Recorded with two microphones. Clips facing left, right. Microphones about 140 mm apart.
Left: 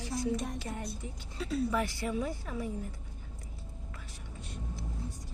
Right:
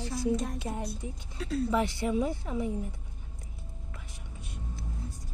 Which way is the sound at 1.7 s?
25° right (ahead or behind).